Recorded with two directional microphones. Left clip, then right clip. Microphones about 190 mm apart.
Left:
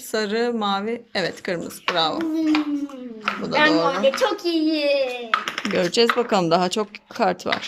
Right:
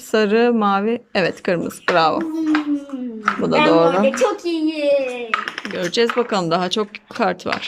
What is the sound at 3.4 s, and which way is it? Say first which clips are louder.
Speech: right 4 dB; 15° right (ahead or behind).